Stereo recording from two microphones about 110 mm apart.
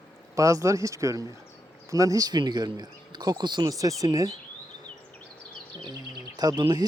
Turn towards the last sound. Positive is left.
turn(degrees=-40)  # may be behind; listen again after turning